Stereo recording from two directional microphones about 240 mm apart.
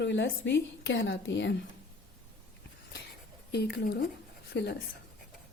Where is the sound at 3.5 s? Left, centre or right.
Left.